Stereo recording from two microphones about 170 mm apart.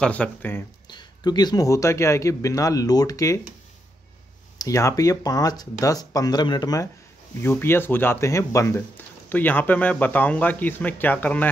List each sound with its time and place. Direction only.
0.0 s speech: 5° left (ahead or behind)
0.8 s speech: 25° left (ahead or behind)
4.6 s speech: 20° left (ahead or behind)